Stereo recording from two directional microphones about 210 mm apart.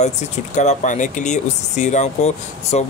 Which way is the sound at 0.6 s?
35° left (ahead or behind).